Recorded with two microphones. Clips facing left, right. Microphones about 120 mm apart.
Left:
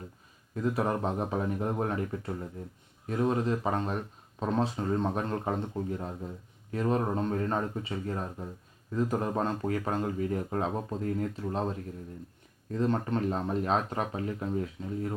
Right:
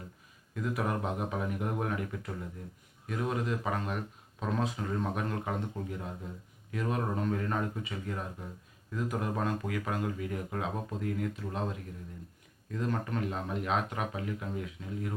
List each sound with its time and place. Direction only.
0.5 s speech: 35° left (ahead or behind)